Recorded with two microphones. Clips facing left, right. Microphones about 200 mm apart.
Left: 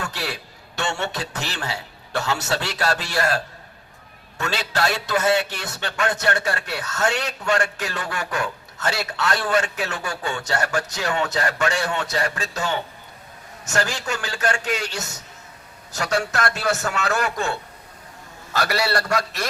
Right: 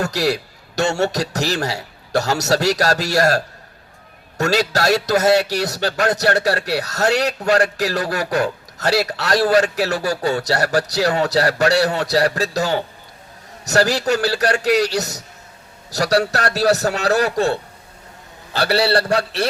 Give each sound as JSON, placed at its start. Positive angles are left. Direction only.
{"t": 0.0, "sound": "a man's voice", "side_deg": -40}